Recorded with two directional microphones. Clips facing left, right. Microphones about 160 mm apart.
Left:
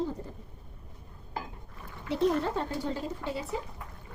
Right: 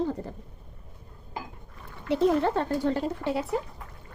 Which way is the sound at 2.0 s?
65° right (ahead or behind).